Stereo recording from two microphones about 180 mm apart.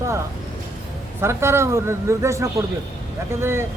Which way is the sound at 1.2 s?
15° right (ahead or behind).